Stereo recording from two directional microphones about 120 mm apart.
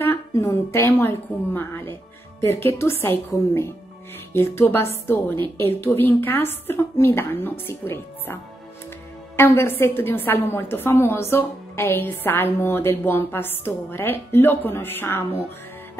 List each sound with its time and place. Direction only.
0.0 s a woman's voice: 25° left (ahead or behind)
9.4 s a woman's voice: 20° left (ahead or behind)